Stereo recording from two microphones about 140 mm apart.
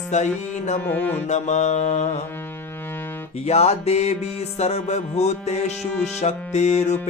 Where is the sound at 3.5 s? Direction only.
50° left (ahead or behind).